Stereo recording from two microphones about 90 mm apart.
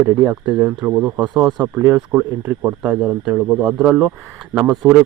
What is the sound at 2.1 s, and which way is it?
A man's voice, 25° right (ahead or behind).